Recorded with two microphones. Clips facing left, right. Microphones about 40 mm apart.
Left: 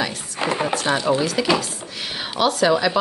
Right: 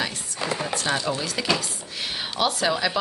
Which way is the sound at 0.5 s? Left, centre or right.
Left.